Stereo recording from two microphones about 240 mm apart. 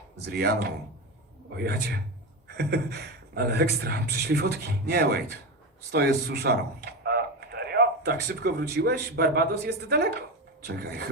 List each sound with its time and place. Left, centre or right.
0.3 s a man's voice: right